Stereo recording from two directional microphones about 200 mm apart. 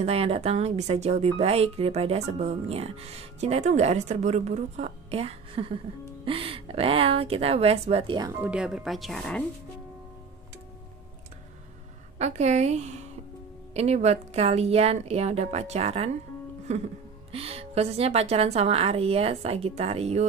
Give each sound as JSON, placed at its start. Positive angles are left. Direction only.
{"t": 0.0, "sound": "a woman's voice", "side_deg": -30}
{"t": 8.4, "sound": "speech", "side_deg": -5}
{"t": 12.2, "sound": "speech", "side_deg": -35}